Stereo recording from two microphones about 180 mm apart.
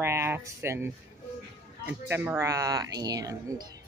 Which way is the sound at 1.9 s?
10° right (ahead or behind).